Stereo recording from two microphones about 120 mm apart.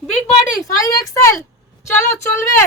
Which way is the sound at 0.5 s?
30° left (ahead or behind).